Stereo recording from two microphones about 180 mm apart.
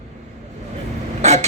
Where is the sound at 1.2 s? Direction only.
40° right (ahead or behind).